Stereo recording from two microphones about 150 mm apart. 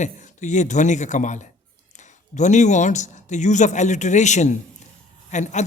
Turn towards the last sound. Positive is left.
turn(degrees=50)  # may be behind; listen again after turning